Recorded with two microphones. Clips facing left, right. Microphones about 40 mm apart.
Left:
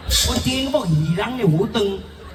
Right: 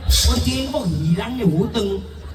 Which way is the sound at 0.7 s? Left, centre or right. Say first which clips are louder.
Left 3 dB; centre.